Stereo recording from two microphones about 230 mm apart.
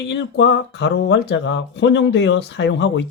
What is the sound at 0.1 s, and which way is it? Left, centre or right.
Speech, left.